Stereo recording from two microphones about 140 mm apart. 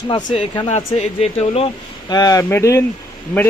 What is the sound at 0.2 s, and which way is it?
Speech, 65° left (ahead or behind).